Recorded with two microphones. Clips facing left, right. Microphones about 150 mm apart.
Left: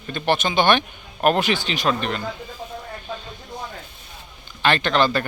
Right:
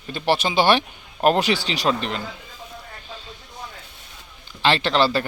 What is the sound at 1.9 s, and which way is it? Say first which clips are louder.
Speech: left 1 dB; 25° right (ahead or behind).